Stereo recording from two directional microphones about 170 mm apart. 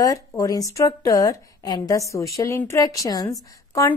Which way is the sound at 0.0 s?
20° left (ahead or behind).